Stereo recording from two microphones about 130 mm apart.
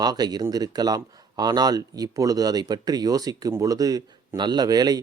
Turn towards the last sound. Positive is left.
turn(degrees=-30)  # may be behind; listen again after turning